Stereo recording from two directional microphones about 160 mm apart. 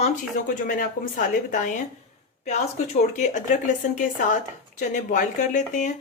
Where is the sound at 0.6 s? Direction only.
60° left (ahead or behind).